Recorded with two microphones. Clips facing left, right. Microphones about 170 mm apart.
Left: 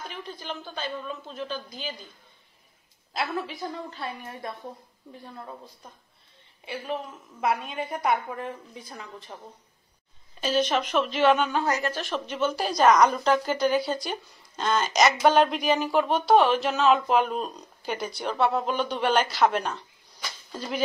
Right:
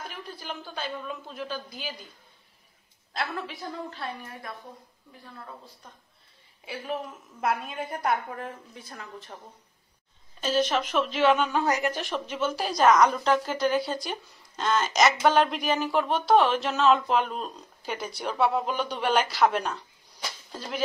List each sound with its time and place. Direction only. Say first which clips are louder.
0.1 s a woman's voice: left 2 dB; 5° right (ahead or behind)
3.1 s speech: left 3 dB; centre (ahead or behind)
6.6 s speech: left 1 dB; 5° right (ahead or behind)
10.4 s speech: left 1 dB; centre (ahead or behind)
11.6 s a woman's voice: right 1 dB; 15° right (ahead or behind)
12.1 s speech: left 2 dB; 5° right (ahead or behind)